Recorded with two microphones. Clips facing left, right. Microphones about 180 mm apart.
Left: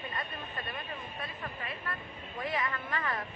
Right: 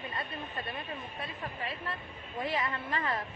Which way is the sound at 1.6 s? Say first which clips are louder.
Right 2 dB; 25° right (ahead or behind).